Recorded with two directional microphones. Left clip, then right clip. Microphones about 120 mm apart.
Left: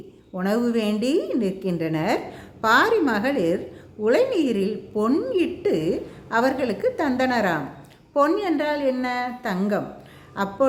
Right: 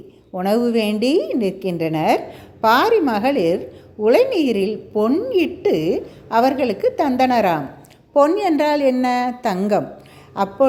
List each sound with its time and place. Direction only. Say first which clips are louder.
0.3 s a woman's voice: right 5 dB; 25° right (ahead or behind)
8.4 s a woman's voice: right 6 dB; 60° right (ahead or behind)
10.3 s a woman's voice: right 5 dB; 30° right (ahead or behind)